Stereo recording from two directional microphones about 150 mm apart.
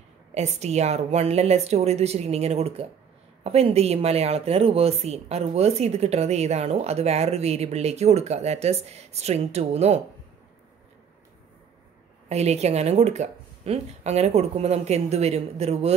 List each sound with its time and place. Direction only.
0.3 s speech: 50° right (ahead or behind)
12.3 s speech: 45° right (ahead or behind)